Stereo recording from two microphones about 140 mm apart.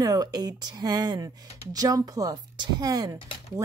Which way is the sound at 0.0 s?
25° right (ahead or behind).